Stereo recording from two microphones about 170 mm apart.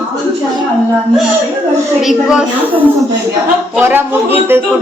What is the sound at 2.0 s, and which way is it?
A woman's voice, 5° right (ahead or behind).